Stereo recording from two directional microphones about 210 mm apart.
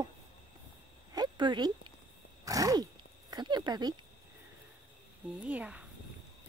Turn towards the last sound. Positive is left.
turn(degrees=-5)  # may be behind; listen again after turning